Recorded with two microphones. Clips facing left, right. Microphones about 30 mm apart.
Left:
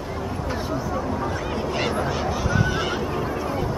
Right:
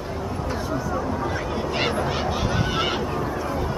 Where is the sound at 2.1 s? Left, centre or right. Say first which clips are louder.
Even; right.